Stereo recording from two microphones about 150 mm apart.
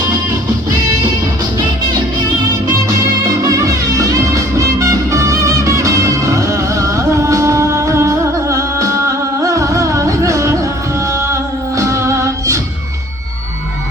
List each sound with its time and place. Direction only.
3.4 s music: 20° right (ahead or behind)
11.8 s music: 20° right (ahead or behind)